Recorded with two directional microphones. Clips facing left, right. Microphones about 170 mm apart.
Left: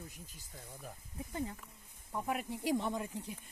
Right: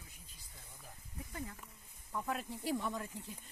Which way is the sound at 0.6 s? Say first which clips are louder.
Left 8 dB; 55° left (ahead or behind).